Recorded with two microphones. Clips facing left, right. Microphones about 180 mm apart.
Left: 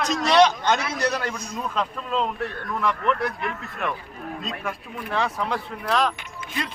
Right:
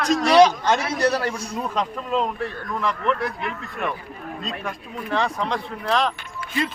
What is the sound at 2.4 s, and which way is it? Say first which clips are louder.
Speech: right 1 dB; centre (ahead or behind).